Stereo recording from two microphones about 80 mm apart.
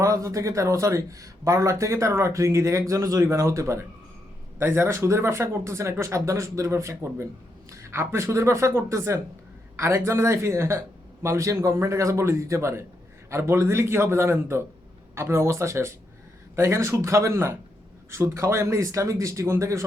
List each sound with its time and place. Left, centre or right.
0.0 s speech: right